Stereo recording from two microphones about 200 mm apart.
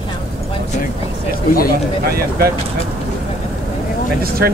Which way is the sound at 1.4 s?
45° left (ahead or behind).